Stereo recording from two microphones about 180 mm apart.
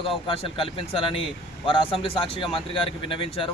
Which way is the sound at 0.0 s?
30° left (ahead or behind).